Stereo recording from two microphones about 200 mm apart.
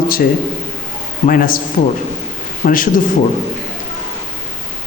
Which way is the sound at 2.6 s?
45° left (ahead or behind).